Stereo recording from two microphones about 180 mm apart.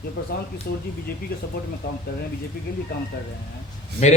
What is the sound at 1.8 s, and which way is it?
Speech, 65° left (ahead or behind).